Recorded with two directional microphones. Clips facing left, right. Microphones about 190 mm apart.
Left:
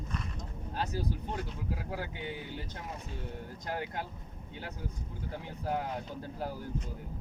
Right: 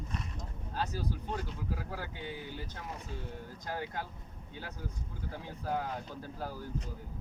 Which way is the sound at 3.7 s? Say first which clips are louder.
Left 1 dB; 20° left (ahead or behind).